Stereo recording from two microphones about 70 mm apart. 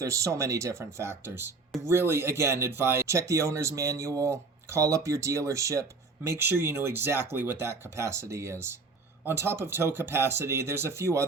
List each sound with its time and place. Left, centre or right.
0.0 s speech: right
6.2 s speech: right